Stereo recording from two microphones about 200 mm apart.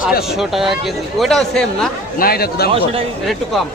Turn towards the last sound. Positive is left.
turn(degrees=0)  # may be behind; listen again after turning